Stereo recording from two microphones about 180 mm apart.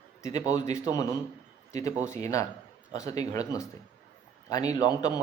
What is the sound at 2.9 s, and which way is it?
A man's voice, 20° left (ahead or behind).